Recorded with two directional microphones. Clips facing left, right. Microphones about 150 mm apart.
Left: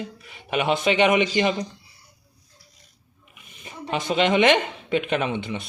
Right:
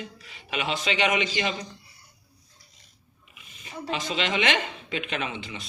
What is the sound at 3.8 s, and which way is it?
Speech, 55° left (ahead or behind).